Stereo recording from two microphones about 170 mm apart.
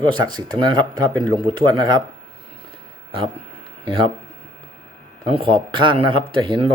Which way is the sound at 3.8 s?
30° right (ahead or behind).